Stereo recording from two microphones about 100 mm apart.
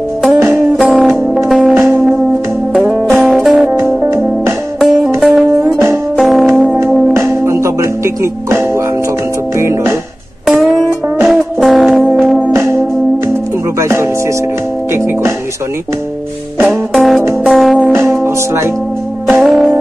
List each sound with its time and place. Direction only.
0.4 s music: 25° right (ahead or behind)
0.7 s music: centre (ahead or behind)
2.7 s music: 15° right (ahead or behind)
3.3 s music: centre (ahead or behind)
4.0 s music: 25° right (ahead or behind)
4.7 s music: 5° right (ahead or behind)
7.2 s music: 25° right (ahead or behind)
10.4 s music: 5° right (ahead or behind)
12.5 s music: 25° right (ahead or behind)
16.6 s music: centre (ahead or behind)
17.9 s music: 25° right (ahead or behind)
19.2 s music: centre (ahead or behind)